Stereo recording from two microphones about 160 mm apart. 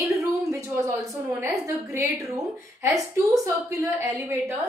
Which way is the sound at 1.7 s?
15° right (ahead or behind).